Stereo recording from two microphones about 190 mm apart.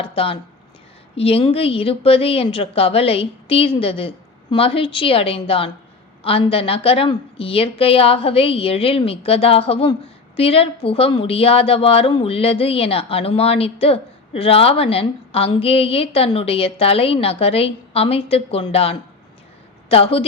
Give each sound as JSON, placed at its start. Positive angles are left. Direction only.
{"t": 0.0, "sound": "a woman's voice", "side_deg": 30}